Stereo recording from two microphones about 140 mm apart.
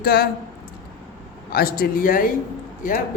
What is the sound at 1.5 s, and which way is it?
Speech, 90° left.